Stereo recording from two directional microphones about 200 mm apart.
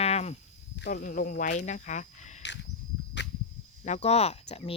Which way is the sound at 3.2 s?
65° left (ahead or behind).